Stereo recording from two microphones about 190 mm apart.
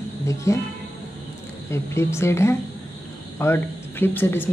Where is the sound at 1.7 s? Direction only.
15° left (ahead or behind).